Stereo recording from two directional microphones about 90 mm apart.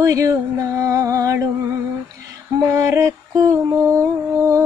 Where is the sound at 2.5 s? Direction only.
35° right (ahead or behind).